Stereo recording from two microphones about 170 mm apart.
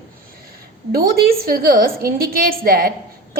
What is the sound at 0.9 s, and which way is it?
A woman's voice, 60° right (ahead or behind).